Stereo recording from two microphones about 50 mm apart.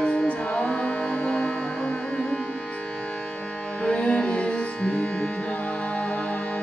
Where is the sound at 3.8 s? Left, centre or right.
Left.